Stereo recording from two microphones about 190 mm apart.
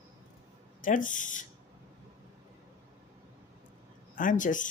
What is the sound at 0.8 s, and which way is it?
Speech, 45° left (ahead or behind).